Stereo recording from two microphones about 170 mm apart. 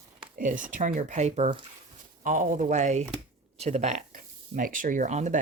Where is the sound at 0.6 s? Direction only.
50° right (ahead or behind).